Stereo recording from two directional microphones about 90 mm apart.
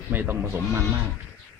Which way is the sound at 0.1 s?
20° right (ahead or behind).